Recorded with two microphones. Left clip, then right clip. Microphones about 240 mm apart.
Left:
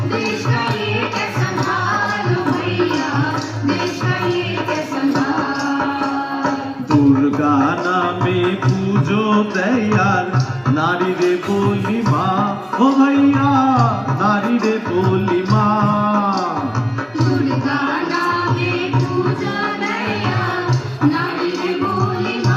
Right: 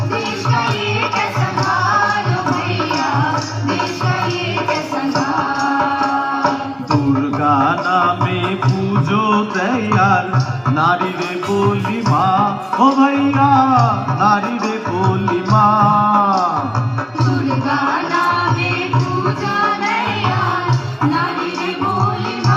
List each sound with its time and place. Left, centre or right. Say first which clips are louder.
7.6 s a sound: right 2 dB; centre
9.3 s music: right 1 dB; centre
10.8 s music: right 2 dB; right
12.8 s music: right 1 dB; centre
14.6 s music: even; centre
17.7 s music: right 5 dB; centre